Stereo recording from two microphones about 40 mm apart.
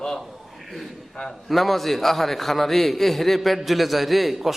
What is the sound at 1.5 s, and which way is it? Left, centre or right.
A man's voice, centre.